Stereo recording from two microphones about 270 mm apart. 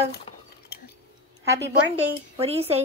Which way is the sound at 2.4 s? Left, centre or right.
Right.